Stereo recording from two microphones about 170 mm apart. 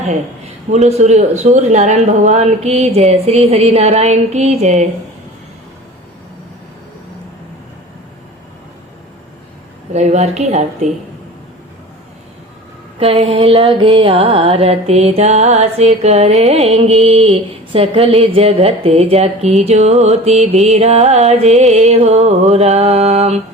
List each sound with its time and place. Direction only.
0.7 s music: 40° right (ahead or behind)
9.9 s music: 40° right (ahead or behind)
13.0 s music: 35° right (ahead or behind)